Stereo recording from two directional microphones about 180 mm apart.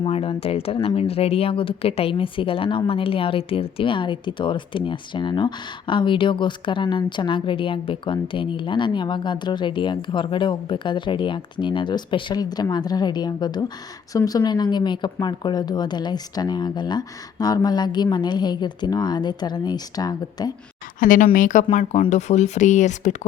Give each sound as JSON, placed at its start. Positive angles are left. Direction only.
{"t": 0.0, "sound": "speech", "side_deg": 30}
{"t": 21.0, "sound": "speech", "side_deg": 50}